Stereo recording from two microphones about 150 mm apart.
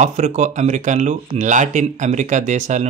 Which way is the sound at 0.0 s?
50° right (ahead or behind).